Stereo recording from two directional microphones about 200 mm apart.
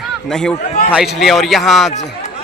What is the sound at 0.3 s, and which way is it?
A man's voice, 5° left (ahead or behind).